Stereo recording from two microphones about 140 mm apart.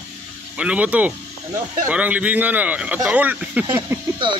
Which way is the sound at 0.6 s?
10° right (ahead or behind).